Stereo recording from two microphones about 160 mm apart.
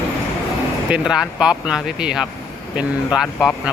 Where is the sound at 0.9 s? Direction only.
5° right (ahead or behind).